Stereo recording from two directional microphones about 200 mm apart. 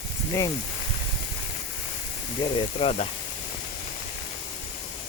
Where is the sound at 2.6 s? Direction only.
30° left (ahead or behind).